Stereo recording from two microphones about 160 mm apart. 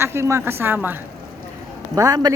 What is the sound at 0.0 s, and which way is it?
Speech, 15° right (ahead or behind).